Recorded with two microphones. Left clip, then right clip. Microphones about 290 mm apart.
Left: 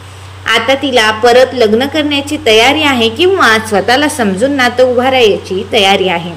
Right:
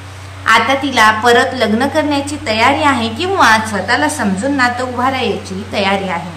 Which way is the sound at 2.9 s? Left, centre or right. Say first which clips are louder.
Left 8 dB; right.